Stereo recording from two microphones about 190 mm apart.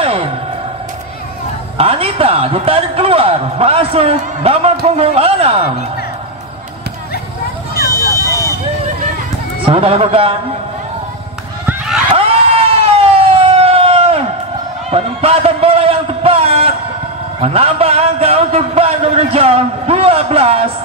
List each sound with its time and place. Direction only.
0.0 s music: 30° right (ahead or behind)
1.8 s a man's voice: 30° right (ahead or behind)
8.1 s fire alarm: 15° left (ahead or behind)
9.7 s a man's voice: 30° right (ahead or behind)
12.2 s emergency vehicle: 30° right (ahead or behind)
14.9 s a man's voice: 30° right (ahead or behind)